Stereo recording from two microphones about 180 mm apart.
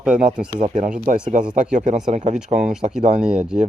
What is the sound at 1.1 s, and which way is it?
Speech, 45° right (ahead or behind).